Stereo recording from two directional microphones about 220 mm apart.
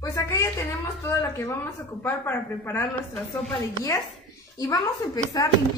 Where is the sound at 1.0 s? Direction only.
10° left (ahead or behind).